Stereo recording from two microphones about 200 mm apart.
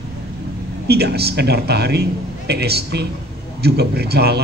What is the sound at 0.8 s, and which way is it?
A man's voice, 55° right (ahead or behind).